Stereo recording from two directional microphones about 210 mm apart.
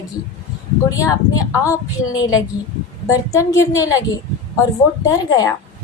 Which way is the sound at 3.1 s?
15° left (ahead or behind).